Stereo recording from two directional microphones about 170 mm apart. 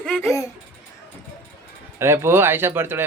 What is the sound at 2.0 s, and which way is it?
Speech, 15° right (ahead or behind).